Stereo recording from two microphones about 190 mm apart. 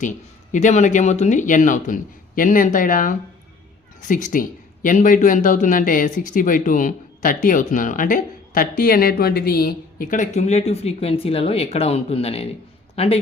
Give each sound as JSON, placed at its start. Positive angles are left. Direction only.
{"t": 0.5, "sound": "speech", "side_deg": 40}